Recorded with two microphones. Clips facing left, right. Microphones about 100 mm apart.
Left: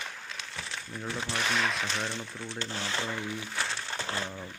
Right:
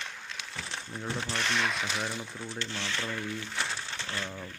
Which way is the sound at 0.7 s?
25° right (ahead or behind).